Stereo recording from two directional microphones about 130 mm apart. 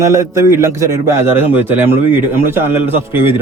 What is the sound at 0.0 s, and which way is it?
A man's voice, 20° right (ahead or behind).